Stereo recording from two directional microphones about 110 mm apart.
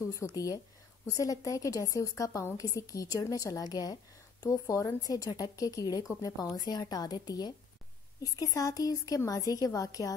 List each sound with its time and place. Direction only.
0.1 s a woman's voice: 30° left (ahead or behind)